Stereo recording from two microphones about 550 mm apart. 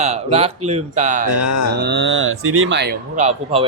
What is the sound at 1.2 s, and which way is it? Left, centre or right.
Speech, left.